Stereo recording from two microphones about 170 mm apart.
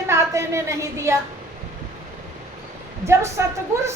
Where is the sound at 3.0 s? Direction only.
15° right (ahead or behind).